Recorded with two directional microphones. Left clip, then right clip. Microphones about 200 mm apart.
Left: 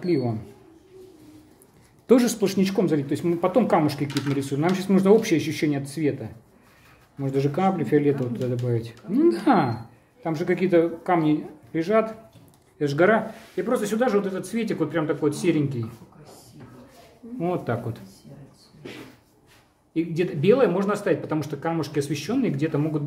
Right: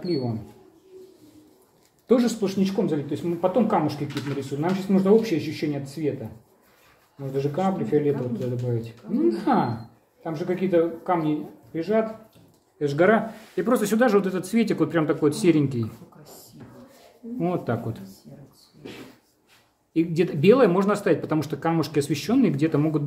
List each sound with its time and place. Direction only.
0.0 s speech: 35° left (ahead or behind)
2.0 s speech: 40° left (ahead or behind)
7.2 s speech: 45° left (ahead or behind)
12.7 s speech: 20° left (ahead or behind)
13.6 s speech: 25° right (ahead or behind)
17.4 s speech: 5° right (ahead or behind)
19.9 s speech: 25° right (ahead or behind)